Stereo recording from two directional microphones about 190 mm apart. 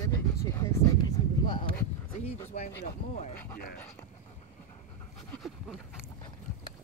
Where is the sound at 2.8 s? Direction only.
40° left (ahead or behind).